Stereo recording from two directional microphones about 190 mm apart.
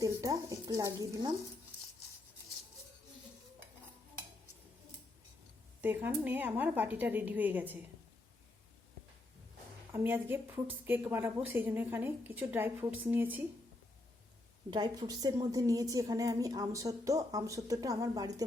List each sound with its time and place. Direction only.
0.0 s a woman's voice: 15° right (ahead or behind)
5.8 s a woman's voice: 10° right (ahead or behind)
9.9 s a woman's voice: 10° right (ahead or behind)
14.7 s a woman's voice: 20° right (ahead or behind)